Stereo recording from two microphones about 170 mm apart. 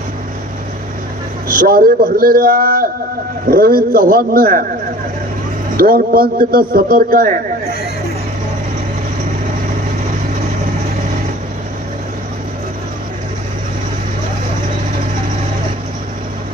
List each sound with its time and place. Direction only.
1.5 s speech: 60° right (ahead or behind)
5.8 s speech: 60° right (ahead or behind)